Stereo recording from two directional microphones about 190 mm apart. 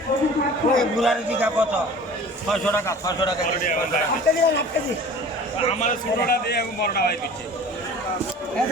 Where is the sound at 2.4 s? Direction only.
5° left (ahead or behind).